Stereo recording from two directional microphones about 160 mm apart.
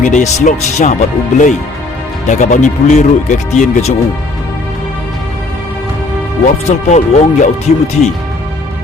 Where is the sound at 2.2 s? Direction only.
50° left (ahead or behind).